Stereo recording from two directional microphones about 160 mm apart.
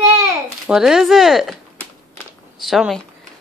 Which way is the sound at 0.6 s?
5° right (ahead or behind).